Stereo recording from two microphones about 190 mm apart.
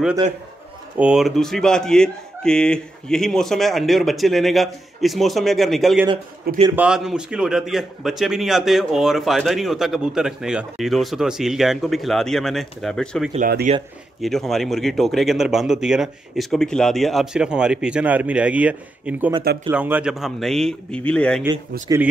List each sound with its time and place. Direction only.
0.9 s a man's voice: 5° right (ahead or behind)
13.7 s speech: 35° right (ahead or behind)
14.2 s a man's voice: centre (ahead or behind)
21.9 s speech: 15° right (ahead or behind)